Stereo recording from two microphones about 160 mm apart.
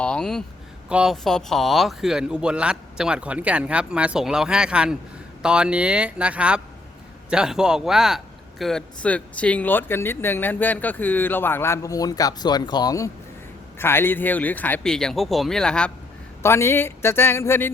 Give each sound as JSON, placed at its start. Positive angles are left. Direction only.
{"t": 0.0, "sound": "a sound", "side_deg": 5}
{"t": 0.9, "sound": "a man's voice", "side_deg": -5}
{"t": 16.4, "sound": "a man's voice", "side_deg": 15}